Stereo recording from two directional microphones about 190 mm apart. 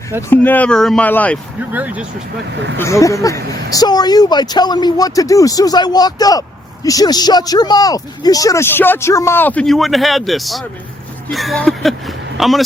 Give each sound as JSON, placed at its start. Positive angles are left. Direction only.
{"t": 0.2, "sound": "speech", "side_deg": 10}
{"t": 1.7, "sound": "speech", "side_deg": -10}
{"t": 2.7, "sound": "speech", "side_deg": 15}